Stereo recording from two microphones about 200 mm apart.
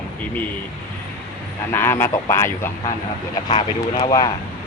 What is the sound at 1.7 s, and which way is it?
Speech, 10° left (ahead or behind).